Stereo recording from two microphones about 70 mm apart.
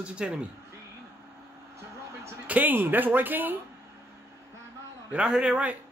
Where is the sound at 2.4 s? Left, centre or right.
Right.